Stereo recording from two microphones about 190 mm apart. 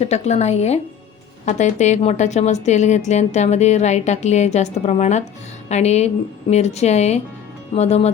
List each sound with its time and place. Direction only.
0.0 s a woman's voice: 35° left (ahead or behind)